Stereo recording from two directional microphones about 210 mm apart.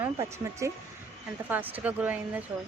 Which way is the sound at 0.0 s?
15° right (ahead or behind).